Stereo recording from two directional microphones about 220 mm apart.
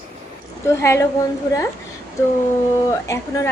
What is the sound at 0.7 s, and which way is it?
Speech, 10° left (ahead or behind).